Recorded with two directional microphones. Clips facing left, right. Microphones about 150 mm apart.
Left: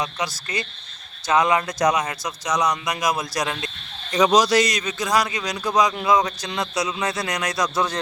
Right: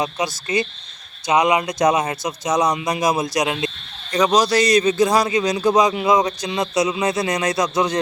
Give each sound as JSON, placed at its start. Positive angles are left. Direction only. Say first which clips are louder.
{"t": 0.0, "sound": "speech", "louder": "right 4 dB", "side_deg": -25}
{"t": 4.4, "sound": "speech", "louder": "right 3 dB", "side_deg": -30}